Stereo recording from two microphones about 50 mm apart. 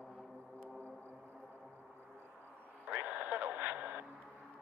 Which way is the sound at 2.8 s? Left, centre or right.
Right.